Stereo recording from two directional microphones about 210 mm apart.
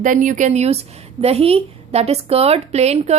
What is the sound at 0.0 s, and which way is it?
A woman's voice, 40° right (ahead or behind).